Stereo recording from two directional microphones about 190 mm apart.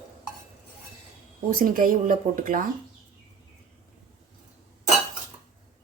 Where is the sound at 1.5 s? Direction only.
50° right (ahead or behind).